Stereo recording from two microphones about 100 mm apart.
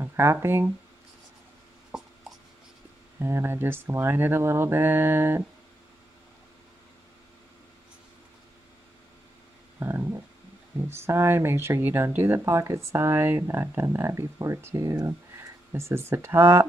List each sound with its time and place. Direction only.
0.0 s speech: 25° right (ahead or behind)
1.9 s writing: 5° right (ahead or behind)
3.2 s speech: 25° right (ahead or behind)
9.8 s speech: 25° right (ahead or behind)